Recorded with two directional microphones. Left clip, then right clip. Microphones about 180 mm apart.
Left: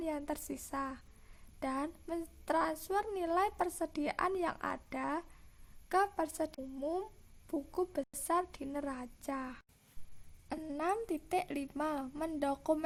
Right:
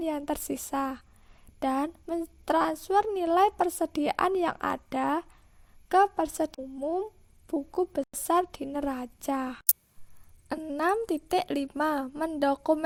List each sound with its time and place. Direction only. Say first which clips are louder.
0.0 s a woman's voice: right 8 dB; 40° right (ahead or behind)
6.7 s a woman's voice: right 7 dB; 25° right (ahead or behind); by 9.6 s 45° right (ahead or behind)
10.5 s a woman's voice: right 8 dB; 35° right (ahead or behind)
10.8 s a woman's voice: right 9 dB; 45° right (ahead or behind)